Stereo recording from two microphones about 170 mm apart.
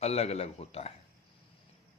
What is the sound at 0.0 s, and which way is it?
Speech, 40° left (ahead or behind).